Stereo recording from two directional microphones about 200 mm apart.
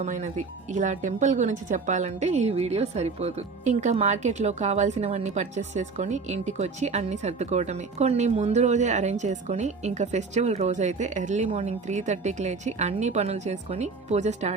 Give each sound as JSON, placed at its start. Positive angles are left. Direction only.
{"t": 0.0, "sound": "speech", "side_deg": -35}